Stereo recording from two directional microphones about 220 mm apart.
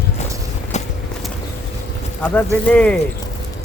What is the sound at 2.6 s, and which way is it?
Speech, 5° left (ahead or behind).